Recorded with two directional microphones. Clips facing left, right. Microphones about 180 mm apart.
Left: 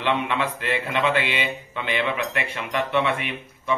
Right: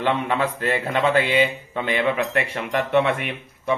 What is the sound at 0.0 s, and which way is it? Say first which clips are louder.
A man's voice: right 2 dB; 45° right (ahead or behind).